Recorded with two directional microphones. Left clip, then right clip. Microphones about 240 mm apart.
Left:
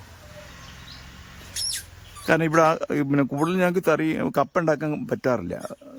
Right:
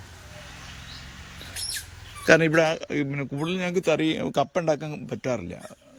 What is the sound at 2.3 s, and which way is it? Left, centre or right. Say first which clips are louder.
A man's voice: even; centre.